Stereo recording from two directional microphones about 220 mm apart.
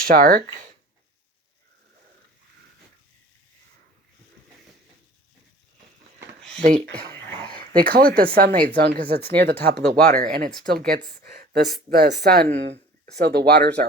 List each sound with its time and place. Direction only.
0.0 s speech: 40° right (ahead or behind)
6.6 s speech: 30° right (ahead or behind)
6.8 s speech: 45° right (ahead or behind)